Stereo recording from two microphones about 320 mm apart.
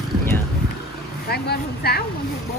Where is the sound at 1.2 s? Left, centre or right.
Left.